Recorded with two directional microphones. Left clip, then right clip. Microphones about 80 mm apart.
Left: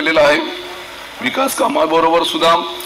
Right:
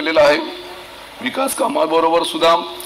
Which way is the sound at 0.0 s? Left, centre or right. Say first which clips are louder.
Left 1 dB; right.